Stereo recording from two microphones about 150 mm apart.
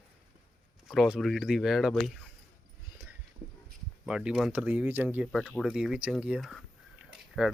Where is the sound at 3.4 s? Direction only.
60° right (ahead or behind).